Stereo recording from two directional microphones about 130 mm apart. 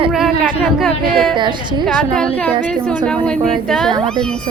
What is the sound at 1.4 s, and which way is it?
Speech, 35° right (ahead or behind).